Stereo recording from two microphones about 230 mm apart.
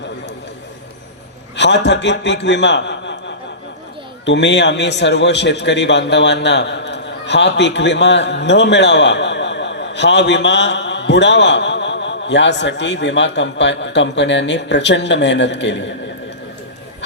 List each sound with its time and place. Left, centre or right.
1.5 s a man's voice: left